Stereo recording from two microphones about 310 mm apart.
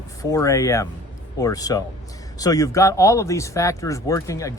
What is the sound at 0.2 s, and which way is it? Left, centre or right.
Speech, centre.